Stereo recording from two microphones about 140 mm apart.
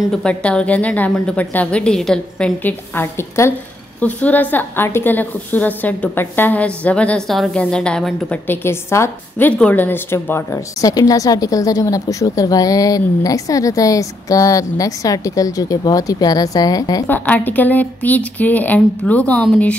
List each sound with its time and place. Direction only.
0.1 s a woman's voice: 5° left (ahead or behind); by 17.0 s 25° left (ahead or behind)
17.1 s a woman's voice: 15° left (ahead or behind)